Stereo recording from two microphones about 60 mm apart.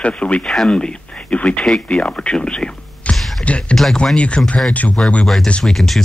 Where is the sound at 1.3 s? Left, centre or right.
Left.